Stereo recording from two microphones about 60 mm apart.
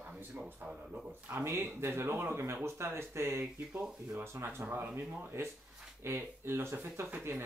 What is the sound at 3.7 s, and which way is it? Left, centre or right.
Speech, centre.